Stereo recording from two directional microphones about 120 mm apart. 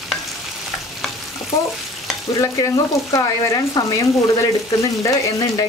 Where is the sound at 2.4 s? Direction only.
30° left (ahead or behind).